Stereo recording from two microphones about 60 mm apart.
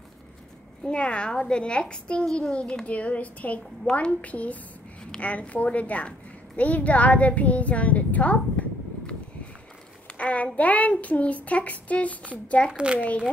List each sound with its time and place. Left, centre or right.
0.8 s a child's voice: centre
2.5 s child singing: centre
5.2 s a woman's voice: left
10.1 s child singing: left
12.7 s speech: centre